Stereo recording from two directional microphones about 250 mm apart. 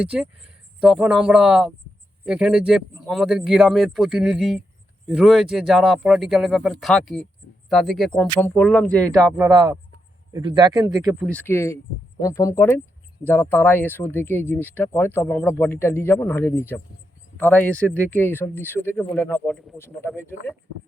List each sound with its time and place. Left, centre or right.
0.0 s speech: centre
9.1 s speech: centre
11.2 s speech: centre